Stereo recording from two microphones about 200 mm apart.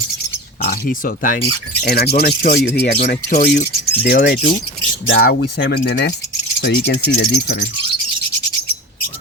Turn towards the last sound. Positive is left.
turn(degrees=55)  # may be behind; listen again after turning